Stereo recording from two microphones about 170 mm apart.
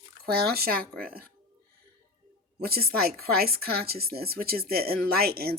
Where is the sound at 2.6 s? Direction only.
65° right (ahead or behind).